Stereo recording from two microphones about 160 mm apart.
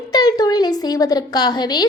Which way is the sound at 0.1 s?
25° left (ahead or behind).